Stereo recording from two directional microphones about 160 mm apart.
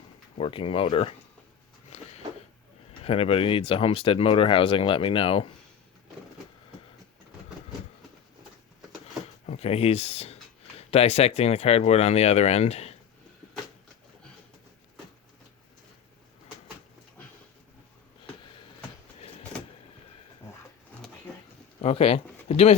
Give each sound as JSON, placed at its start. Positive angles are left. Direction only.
{"t": 0.3, "sound": "speech", "side_deg": 35}
{"t": 1.9, "sound": "a sound", "side_deg": 45}
{"t": 3.0, "sound": "speech", "side_deg": 35}
{"t": 9.5, "sound": "speech", "side_deg": 40}
{"t": 21.8, "sound": "speech", "side_deg": 40}